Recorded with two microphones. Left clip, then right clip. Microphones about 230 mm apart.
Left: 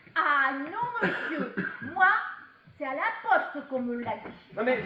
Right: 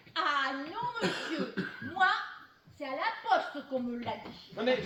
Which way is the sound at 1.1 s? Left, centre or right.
Right.